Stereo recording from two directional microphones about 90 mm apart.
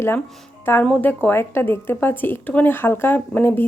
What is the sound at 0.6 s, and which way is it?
Speech, 25° left (ahead or behind).